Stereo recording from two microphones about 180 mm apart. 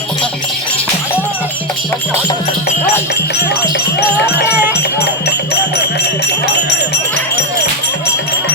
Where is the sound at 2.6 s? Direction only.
65° left (ahead or behind).